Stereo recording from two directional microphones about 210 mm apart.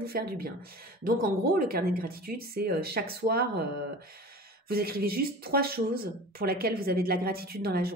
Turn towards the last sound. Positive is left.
turn(degrees=-45)  # may be behind; listen again after turning